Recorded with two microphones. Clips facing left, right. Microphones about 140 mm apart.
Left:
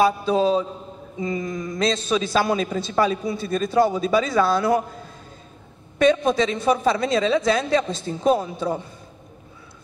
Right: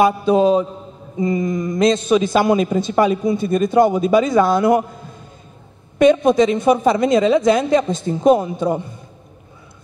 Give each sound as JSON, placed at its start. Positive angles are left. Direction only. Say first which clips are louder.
{"t": 0.0, "sound": "a woman's voice", "louder": "right 5 dB", "side_deg": -15}
{"t": 5.9, "sound": "a woman's voice", "louder": "right 6 dB", "side_deg": -15}